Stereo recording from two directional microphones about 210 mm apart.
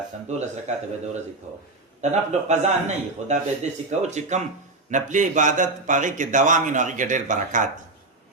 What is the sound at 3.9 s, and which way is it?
Speech, 35° right (ahead or behind).